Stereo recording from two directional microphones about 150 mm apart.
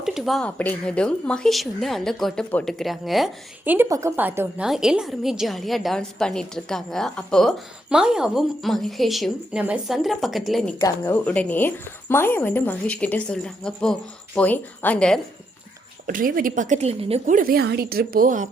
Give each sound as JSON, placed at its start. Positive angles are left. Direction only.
{"t": 0.0, "sound": "a woman's voice", "side_deg": 0}
{"t": 3.6, "sound": "a woman's voice", "side_deg": -15}
{"t": 10.8, "sound": "speech", "side_deg": 25}
{"t": 11.1, "sound": "a woman's voice", "side_deg": 10}
{"t": 16.0, "sound": "a woman's voice", "side_deg": -70}
{"t": 17.2, "sound": "a woman's voice", "side_deg": -65}